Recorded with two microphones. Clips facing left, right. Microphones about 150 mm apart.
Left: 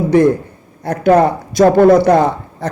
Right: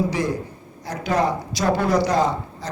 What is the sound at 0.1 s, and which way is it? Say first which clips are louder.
A man's voice: left 13 dB; 55° left (ahead or behind).